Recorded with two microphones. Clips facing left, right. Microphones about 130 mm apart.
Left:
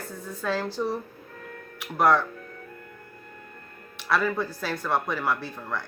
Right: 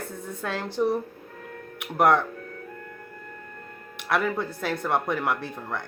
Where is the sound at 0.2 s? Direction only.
20° right (ahead or behind).